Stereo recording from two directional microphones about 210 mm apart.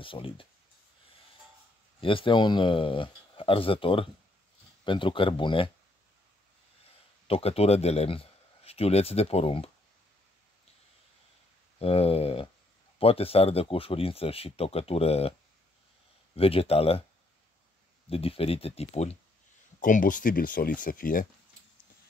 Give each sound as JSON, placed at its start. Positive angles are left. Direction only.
{"t": 0.0, "sound": "speech", "side_deg": 25}
{"t": 2.0, "sound": "speech", "side_deg": 25}
{"t": 7.2, "sound": "speech", "side_deg": 30}
{"t": 11.8, "sound": "speech", "side_deg": 30}
{"t": 16.3, "sound": "speech", "side_deg": 25}
{"t": 18.1, "sound": "speech", "side_deg": 25}